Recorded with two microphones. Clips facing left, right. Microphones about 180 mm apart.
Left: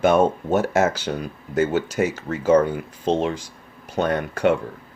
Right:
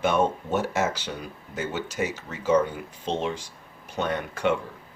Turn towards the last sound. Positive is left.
turn(degrees=45)  # may be behind; listen again after turning